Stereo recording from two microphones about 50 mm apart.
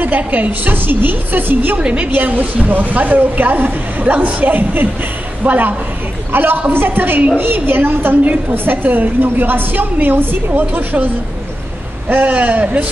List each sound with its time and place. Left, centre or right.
0.0 s a woman's voice: right
1.8 s a woman's voice: right
2.1 s a woman's voice: right
12.1 s a woman's voice: right